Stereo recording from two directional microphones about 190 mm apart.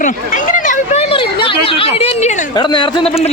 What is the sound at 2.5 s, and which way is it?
Speech, 25° left (ahead or behind).